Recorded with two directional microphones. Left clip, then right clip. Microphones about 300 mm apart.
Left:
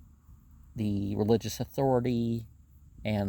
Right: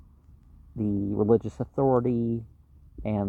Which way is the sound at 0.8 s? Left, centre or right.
Left.